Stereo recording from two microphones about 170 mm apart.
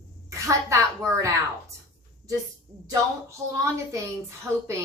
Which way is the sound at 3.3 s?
20° right (ahead or behind).